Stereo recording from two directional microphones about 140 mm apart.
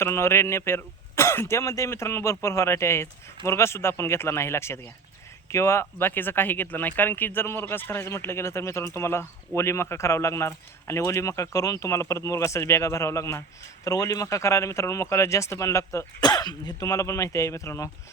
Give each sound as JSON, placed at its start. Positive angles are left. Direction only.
{"t": 0.0, "sound": "speech", "side_deg": 20}